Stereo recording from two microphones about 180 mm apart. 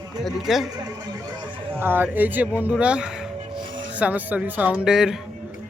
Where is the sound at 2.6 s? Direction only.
10° right (ahead or behind).